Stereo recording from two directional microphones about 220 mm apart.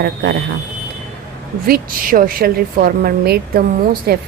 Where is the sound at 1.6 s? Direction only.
40° right (ahead or behind).